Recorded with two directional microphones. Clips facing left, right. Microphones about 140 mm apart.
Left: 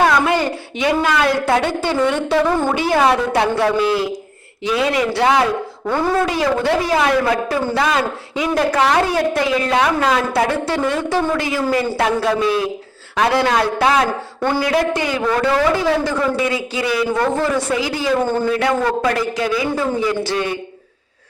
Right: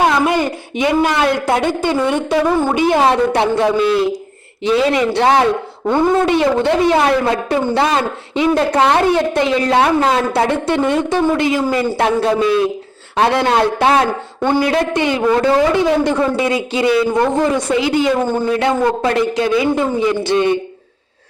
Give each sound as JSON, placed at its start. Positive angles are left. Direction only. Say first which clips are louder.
{"t": 0.0, "sound": "a woman's voice", "louder": "right 1 dB", "side_deg": -15}
{"t": 9.6, "sound": "a man's voice", "louder": "right 3 dB", "side_deg": -35}